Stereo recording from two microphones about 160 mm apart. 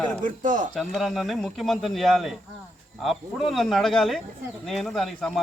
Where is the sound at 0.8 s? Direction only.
Centre (ahead or behind).